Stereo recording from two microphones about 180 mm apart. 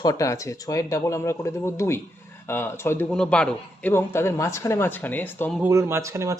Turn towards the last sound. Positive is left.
turn(degrees=-15)  # may be behind; listen again after turning